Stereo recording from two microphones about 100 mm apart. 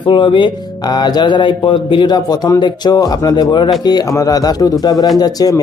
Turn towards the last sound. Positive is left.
turn(degrees=40)  # may be behind; listen again after turning